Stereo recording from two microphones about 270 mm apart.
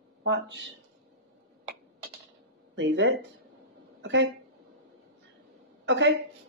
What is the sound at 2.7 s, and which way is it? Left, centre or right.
Speech, right.